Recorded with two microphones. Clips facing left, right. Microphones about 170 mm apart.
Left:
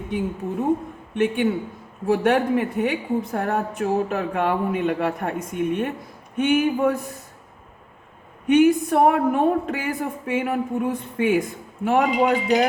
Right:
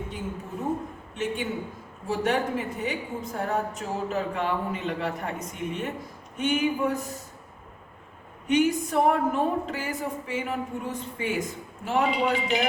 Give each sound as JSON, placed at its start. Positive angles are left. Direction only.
{"t": 1.1, "sound": "a woman's voice", "side_deg": 60}
{"t": 8.4, "sound": "a woman's voice", "side_deg": 55}